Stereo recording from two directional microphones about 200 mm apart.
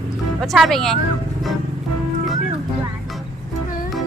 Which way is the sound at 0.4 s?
Centre (ahead or behind).